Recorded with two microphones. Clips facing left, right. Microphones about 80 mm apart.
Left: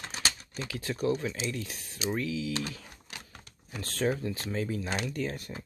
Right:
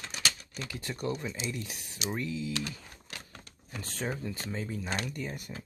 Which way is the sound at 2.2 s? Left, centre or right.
Left.